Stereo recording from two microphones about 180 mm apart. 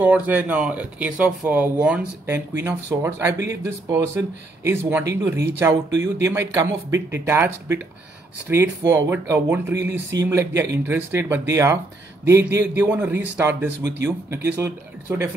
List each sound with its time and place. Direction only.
0.0 s speech: 10° right (ahead or behind)